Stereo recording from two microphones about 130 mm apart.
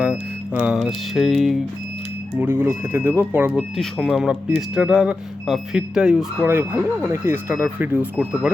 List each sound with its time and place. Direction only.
0.0 s speech: 10° right (ahead or behind)
2.4 s speech: 15° right (ahead or behind)
3.5 s speech: centre (ahead or behind)